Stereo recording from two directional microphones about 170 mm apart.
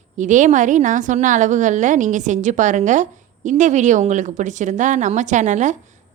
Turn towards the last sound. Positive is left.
turn(degrees=-45)  # may be behind; listen again after turning